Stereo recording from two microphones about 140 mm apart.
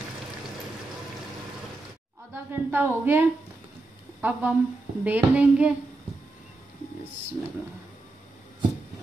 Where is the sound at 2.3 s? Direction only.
15° right (ahead or behind).